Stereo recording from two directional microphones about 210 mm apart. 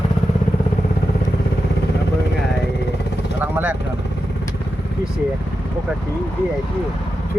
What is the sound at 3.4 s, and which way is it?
Vehicle, 10° right (ahead or behind).